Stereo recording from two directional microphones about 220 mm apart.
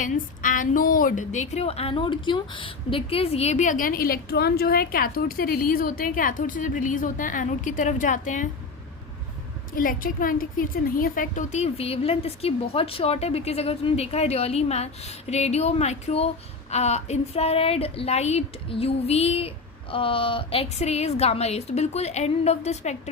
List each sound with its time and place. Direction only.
0.0 s a woman's voice: 35° left (ahead or behind)
9.7 s a woman's voice: 40° left (ahead or behind)